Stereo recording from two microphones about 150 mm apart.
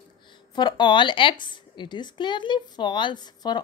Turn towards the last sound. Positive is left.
turn(degrees=30)  # may be behind; listen again after turning